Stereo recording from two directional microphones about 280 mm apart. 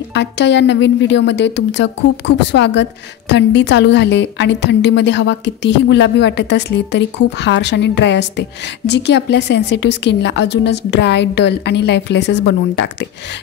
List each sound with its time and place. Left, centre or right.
0.1 s a woman's voice: left